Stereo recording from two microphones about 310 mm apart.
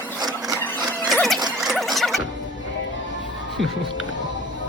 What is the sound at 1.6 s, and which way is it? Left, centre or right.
Zipper, centre.